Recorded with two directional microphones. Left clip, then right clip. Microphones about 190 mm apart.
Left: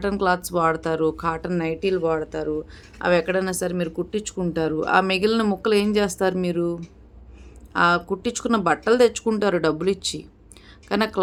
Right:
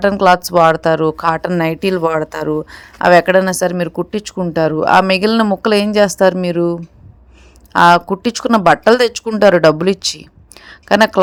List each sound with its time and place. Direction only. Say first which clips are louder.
0.0 s speech: right 11 dB; 40° right (ahead or behind)